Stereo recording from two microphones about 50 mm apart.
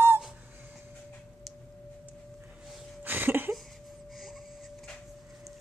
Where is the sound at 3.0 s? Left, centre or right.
Right.